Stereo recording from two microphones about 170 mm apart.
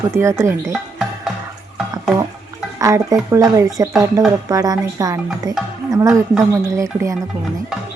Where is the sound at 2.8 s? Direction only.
20° right (ahead or behind).